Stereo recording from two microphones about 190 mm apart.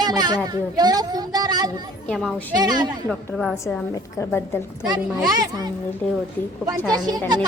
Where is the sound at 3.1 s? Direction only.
Centre (ahead or behind).